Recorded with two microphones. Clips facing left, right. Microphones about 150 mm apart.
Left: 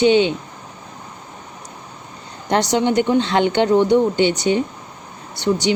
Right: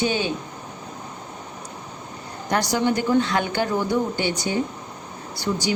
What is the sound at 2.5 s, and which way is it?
Speech, 20° left (ahead or behind).